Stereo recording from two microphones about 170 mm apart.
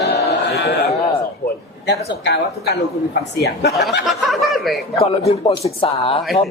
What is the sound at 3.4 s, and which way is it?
Speech, 70° left (ahead or behind).